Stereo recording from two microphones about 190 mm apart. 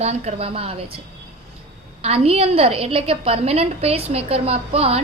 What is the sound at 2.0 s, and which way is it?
A woman's voice, 30° right (ahead or behind).